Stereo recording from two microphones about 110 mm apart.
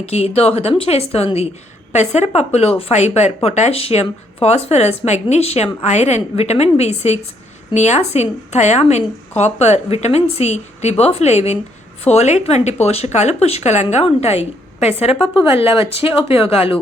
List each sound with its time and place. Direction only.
0.0 s a woman's voice: 70° left (ahead or behind)
1.9 s speech: 90° left
7.7 s a woman's voice: 90° left
12.8 s a woman's voice: 75° left (ahead or behind)
15.1 s a woman's voice: 5° right (ahead or behind)
15.4 s speech: 60° left (ahead or behind)